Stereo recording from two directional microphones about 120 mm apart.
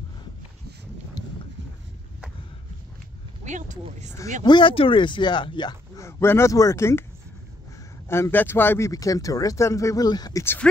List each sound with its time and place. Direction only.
3.4 s speech: 90° right
4.5 s speech: 45° left (ahead or behind)
5.9 s speech: 20° left (ahead or behind)
8.1 s speech: 20° left (ahead or behind); by 10.4 s 35° left (ahead or behind)
10.4 s speech: 20° left (ahead or behind)